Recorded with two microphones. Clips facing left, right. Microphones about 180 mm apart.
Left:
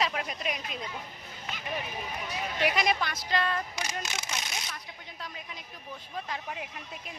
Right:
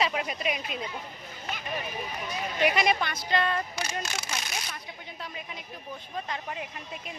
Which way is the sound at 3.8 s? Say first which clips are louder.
Right 2 dB; 20° left (ahead or behind).